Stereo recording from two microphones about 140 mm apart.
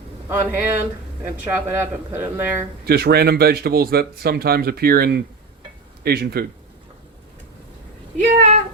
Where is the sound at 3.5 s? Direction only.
90° right.